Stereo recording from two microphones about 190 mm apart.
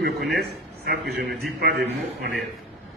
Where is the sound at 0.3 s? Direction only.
60° right (ahead or behind).